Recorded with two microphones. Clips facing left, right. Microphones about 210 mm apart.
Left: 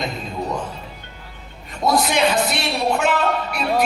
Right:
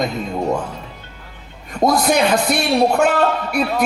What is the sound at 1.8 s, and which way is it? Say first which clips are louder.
A man's voice: right 3 dB; 50° right (ahead or behind).